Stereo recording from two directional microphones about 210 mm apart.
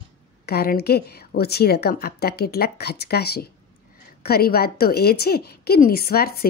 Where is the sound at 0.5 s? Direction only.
50° left (ahead or behind).